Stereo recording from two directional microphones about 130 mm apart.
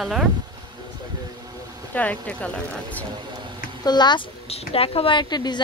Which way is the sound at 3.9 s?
35° left (ahead or behind).